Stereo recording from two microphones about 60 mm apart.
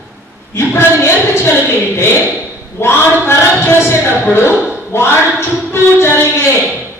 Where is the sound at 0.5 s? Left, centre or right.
Left.